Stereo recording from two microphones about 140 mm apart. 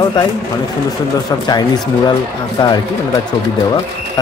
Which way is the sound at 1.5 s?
30° left (ahead or behind).